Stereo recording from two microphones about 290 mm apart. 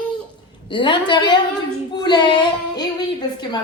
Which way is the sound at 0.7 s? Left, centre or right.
Centre.